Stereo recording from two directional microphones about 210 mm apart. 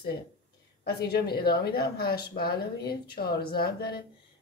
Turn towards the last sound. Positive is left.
turn(degrees=50)  # may be behind; listen again after turning